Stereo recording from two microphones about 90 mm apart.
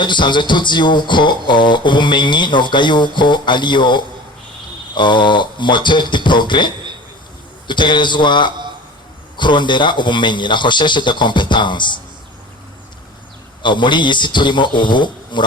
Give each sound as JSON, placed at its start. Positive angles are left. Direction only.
{"t": 0.0, "sound": "speech", "side_deg": 60}
{"t": 13.6, "sound": "speech", "side_deg": 60}